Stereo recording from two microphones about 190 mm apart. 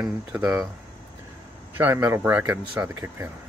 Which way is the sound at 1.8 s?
10° right (ahead or behind).